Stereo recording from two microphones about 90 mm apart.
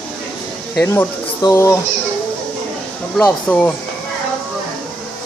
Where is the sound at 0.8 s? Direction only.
30° left (ahead or behind).